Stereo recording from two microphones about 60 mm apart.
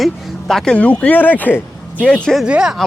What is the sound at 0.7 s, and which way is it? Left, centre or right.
Speech, centre.